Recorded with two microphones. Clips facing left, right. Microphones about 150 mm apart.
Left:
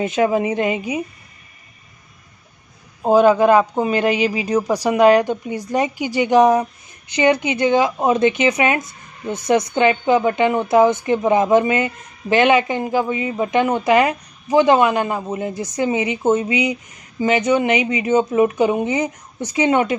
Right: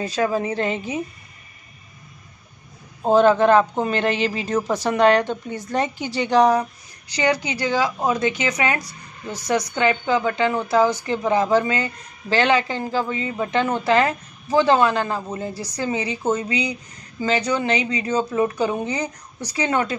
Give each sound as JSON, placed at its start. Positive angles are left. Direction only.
{"t": 0.0, "sound": "speech", "side_deg": 20}
{"t": 3.0, "sound": "speech", "side_deg": 10}